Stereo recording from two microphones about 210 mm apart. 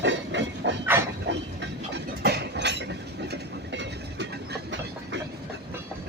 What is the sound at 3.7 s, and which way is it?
Train, 55° right (ahead or behind).